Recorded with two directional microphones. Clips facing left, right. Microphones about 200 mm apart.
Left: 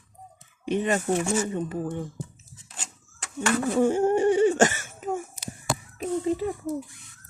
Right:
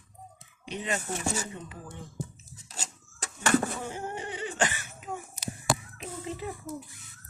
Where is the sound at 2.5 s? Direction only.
40° right (ahead or behind).